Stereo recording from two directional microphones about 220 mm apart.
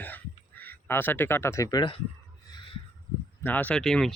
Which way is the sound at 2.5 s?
20° left (ahead or behind).